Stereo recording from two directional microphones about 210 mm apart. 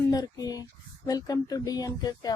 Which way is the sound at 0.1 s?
20° left (ahead or behind).